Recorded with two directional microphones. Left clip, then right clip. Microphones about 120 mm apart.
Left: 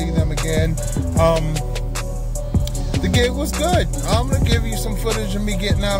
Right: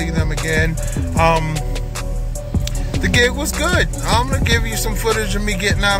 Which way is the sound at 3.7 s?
20° left (ahead or behind).